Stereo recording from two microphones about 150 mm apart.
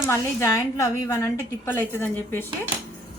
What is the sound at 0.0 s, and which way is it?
A woman's voice, 15° left (ahead or behind).